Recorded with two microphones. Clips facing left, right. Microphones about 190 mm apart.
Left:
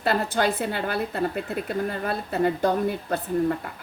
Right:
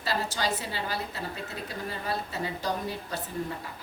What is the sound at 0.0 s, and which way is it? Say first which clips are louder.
A woman's voice: left 7 dB; 55° left (ahead or behind).